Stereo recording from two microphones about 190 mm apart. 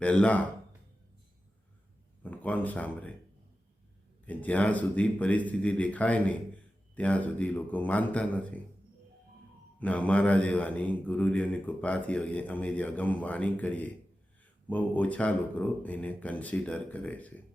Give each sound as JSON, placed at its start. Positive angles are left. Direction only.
{"t": 0.0, "sound": "speech", "side_deg": 5}
{"t": 2.2, "sound": "speech", "side_deg": 10}
{"t": 4.3, "sound": "speech", "side_deg": 10}
{"t": 9.8, "sound": "speech", "side_deg": 5}